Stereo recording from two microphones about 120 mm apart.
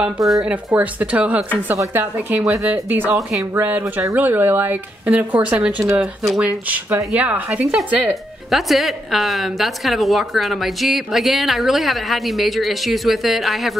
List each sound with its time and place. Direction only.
0.0 s a woman's voice: centre (ahead or behind)